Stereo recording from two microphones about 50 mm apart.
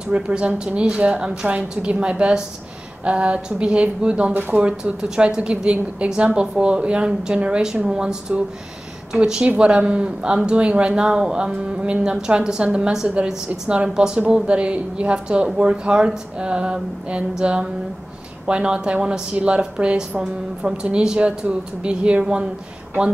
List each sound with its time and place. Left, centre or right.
0.1 s a woman's voice: right
4.3 s speech: right
4.6 s a woman's voice: right
13.9 s a woman's voice: centre